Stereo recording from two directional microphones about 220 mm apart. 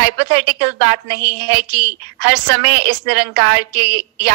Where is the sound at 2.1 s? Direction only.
50° right (ahead or behind).